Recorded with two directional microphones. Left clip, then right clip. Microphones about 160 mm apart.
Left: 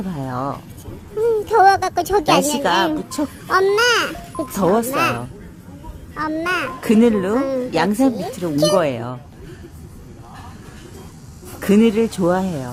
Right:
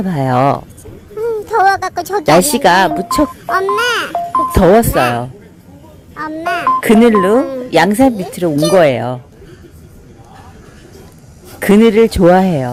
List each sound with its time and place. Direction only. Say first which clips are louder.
0.0 s speech: right 13 dB; 30° right (ahead or behind)
1.2 s speech: right 1 dB; 5° right (ahead or behind)
2.6 s speech: right 8 dB; 30° right (ahead or behind)
3.5 s a child's voice: even; centre (ahead or behind)
4.5 s speech: right 8 dB; 25° right (ahead or behind)
4.9 s a child's voice: right 5 dB; 5° right (ahead or behind)
6.1 s a child's voice: right 3 dB; 5° right (ahead or behind)
6.8 s speech: right 6 dB; 25° right (ahead or behind)
7.3 s a child's voice: right 6 dB; 5° right (ahead or behind)
7.7 s speech: right 11 dB; 25° right (ahead or behind)
11.9 s speech: right 9 dB; 20° right (ahead or behind)